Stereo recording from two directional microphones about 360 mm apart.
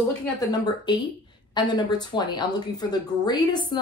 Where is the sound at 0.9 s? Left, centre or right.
Centre.